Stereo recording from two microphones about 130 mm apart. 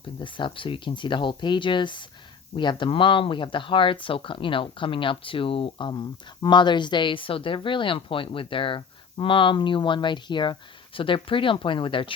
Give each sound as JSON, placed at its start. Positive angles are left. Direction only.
{"t": 0.2, "sound": "speech", "side_deg": 40}